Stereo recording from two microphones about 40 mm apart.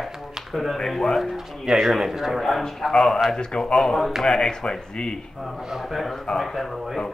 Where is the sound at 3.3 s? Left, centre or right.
Left.